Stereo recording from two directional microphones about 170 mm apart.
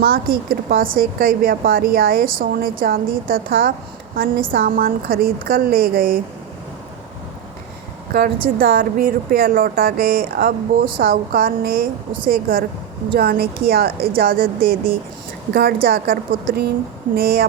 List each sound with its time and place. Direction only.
0.0 s a woman's voice: 60° right (ahead or behind)
8.1 s a woman's voice: 60° right (ahead or behind)